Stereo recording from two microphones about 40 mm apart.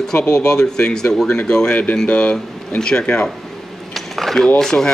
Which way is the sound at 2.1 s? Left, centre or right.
Left.